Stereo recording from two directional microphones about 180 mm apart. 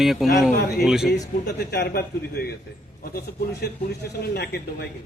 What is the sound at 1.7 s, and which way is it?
Speech, 65° left (ahead or behind).